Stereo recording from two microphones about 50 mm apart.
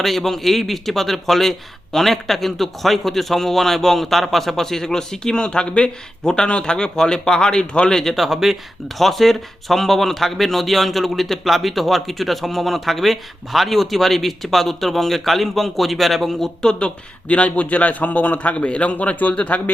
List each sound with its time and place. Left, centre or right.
0.0 s a man's voice: centre
8.1 s speech: centre
17.2 s a man's voice: left